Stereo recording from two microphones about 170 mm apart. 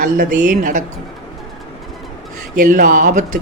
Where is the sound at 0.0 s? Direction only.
50° right (ahead or behind).